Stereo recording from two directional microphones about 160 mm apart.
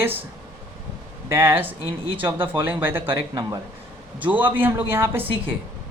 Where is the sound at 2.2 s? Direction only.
10° right (ahead or behind).